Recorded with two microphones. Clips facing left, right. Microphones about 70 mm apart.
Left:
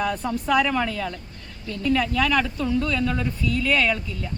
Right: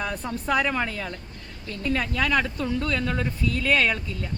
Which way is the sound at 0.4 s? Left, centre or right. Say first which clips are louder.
Left 3 dB; right.